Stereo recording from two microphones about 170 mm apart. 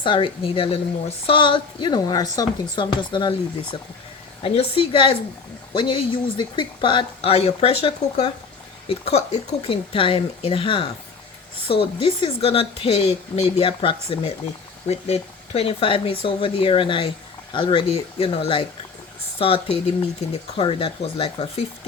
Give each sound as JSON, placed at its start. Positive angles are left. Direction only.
{"t": 0.0, "sound": "a woman's voice", "side_deg": 30}